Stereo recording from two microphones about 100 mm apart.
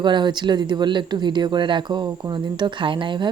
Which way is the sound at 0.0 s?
50° right (ahead or behind).